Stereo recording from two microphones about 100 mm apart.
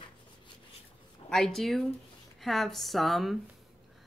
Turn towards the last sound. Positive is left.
turn(degrees=0)  # may be behind; listen again after turning